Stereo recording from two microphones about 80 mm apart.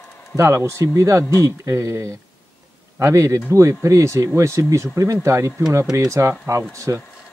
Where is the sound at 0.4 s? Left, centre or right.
Right.